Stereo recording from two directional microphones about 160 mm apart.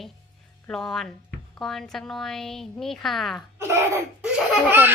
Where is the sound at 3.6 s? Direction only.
15° right (ahead or behind).